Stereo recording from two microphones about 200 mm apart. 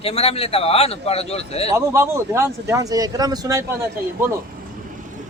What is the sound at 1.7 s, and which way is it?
Speech, 15° right (ahead or behind).